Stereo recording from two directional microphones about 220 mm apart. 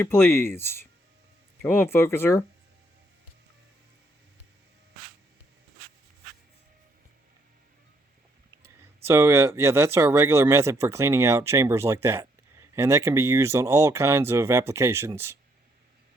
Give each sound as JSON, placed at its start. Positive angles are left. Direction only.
{"t": 0.0, "sound": "speech", "side_deg": 10}
{"t": 9.0, "sound": "speech", "side_deg": -10}